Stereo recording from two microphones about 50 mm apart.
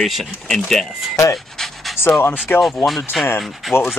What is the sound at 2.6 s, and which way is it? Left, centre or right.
Speech, centre.